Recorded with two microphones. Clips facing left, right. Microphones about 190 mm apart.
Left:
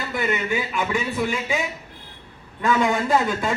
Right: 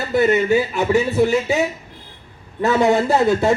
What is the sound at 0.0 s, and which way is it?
Speech, 40° right (ahead or behind).